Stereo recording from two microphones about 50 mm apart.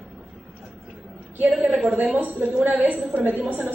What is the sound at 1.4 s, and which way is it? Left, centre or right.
A woman's voice, right.